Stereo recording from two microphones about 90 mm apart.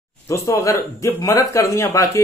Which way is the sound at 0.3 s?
35° left (ahead or behind).